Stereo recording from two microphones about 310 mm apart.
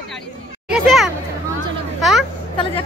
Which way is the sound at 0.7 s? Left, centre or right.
Centre.